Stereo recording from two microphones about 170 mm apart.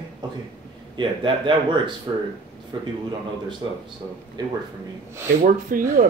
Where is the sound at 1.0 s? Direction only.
30° right (ahead or behind).